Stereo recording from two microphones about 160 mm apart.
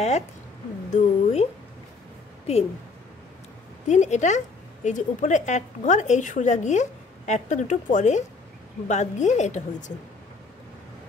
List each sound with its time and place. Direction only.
0.9 s speech: 40° left (ahead or behind)
3.8 s speech: 45° left (ahead or behind)